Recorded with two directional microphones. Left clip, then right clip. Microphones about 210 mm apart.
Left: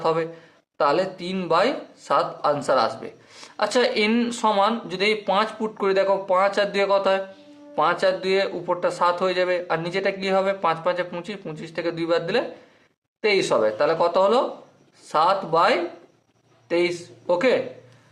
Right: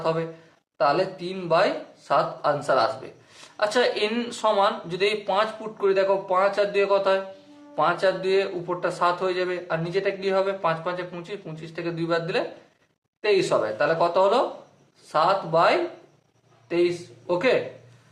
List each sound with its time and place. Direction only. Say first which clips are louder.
0.0 s speech: left 3 dB; 40° left (ahead or behind)